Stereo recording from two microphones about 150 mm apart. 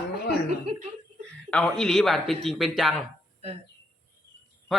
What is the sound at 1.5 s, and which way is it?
A man's voice, 5° left (ahead or behind).